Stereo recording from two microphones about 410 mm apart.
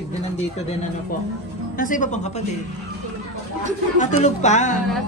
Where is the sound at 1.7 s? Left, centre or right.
Centre.